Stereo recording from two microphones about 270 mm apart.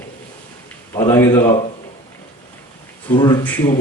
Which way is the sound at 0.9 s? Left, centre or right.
Centre.